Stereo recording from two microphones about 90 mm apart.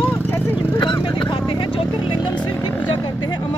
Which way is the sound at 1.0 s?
65° left (ahead or behind).